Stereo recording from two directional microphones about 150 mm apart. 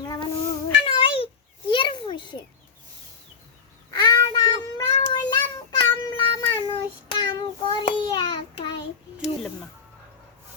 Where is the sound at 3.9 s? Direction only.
25° left (ahead or behind).